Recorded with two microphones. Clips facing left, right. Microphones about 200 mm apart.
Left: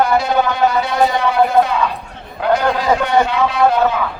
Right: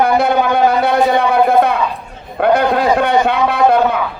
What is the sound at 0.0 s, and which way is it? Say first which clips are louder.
A man's voice: right 2 dB; 60° right (ahead or behind).